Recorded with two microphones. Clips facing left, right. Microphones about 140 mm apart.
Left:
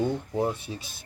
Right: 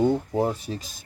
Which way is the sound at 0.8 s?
40° right (ahead or behind).